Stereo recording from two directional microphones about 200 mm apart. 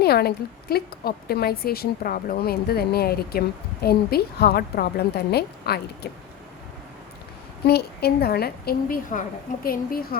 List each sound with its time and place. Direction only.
0.0 s a woman's voice: 50° left (ahead or behind)
7.7 s a woman's voice: 50° left (ahead or behind)